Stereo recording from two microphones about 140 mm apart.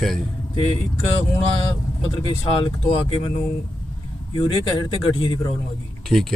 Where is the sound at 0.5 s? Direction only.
40° left (ahead or behind).